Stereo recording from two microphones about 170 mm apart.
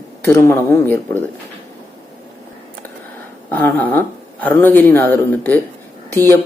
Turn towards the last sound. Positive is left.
turn(degrees=15)  # may be behind; listen again after turning